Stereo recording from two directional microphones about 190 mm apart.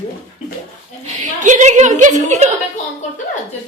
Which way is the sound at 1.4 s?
40° right (ahead or behind).